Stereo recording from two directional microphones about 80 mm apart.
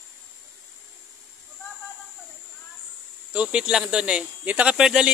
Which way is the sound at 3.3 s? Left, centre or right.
Centre.